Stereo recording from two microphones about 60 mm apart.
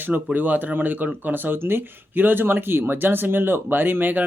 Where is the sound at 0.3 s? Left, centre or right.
Right.